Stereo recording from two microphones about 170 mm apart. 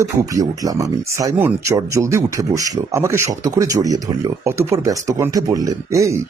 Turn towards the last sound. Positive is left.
turn(degrees=-15)  # may be behind; listen again after turning